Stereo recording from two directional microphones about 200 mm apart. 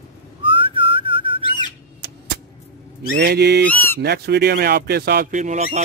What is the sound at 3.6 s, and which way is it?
Speech, 10° left (ahead or behind).